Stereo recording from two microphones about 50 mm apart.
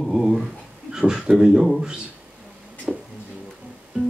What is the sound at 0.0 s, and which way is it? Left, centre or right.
Dog, centre.